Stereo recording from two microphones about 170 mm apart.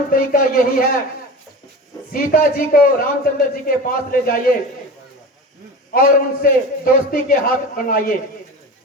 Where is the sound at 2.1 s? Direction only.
55° left (ahead or behind).